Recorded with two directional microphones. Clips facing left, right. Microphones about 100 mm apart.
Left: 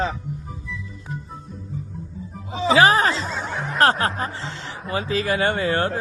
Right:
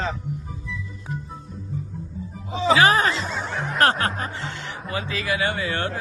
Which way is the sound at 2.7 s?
30° left (ahead or behind).